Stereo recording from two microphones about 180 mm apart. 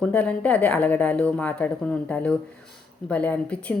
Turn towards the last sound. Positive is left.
turn(degrees=5)  # may be behind; listen again after turning